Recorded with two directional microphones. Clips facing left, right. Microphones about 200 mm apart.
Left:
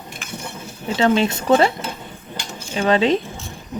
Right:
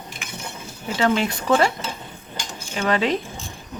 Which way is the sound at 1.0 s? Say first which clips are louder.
Left 3 dB; 25° left (ahead or behind).